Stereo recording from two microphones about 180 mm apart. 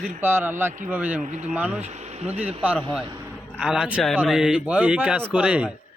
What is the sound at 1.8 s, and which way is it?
Speech, 40° right (ahead or behind).